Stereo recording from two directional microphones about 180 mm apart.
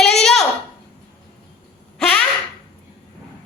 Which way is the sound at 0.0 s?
Centre (ahead or behind).